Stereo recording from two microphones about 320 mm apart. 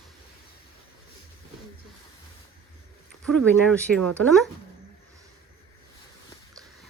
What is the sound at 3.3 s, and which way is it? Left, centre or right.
Speech, centre.